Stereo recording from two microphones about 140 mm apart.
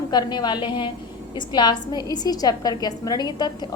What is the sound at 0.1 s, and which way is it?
A woman's voice, 30° left (ahead or behind).